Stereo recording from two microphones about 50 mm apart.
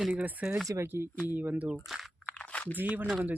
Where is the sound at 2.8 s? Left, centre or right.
Right.